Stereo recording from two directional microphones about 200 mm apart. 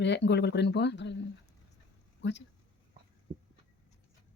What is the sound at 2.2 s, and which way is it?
Speech, 65° left (ahead or behind).